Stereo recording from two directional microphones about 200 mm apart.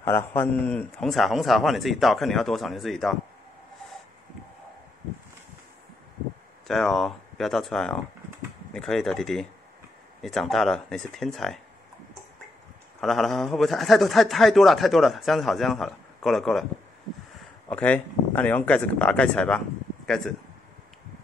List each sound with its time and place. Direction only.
0.0 s a man's voice: 10° left (ahead or behind)
6.7 s a man's voice: centre (ahead or behind)
13.0 s a man's voice: centre (ahead or behind)
17.6 s speech: 5° left (ahead or behind)